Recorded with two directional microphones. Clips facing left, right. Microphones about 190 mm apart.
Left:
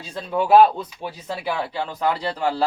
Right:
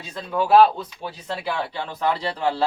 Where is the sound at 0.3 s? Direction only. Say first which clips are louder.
Left 1 dB; 20° left (ahead or behind).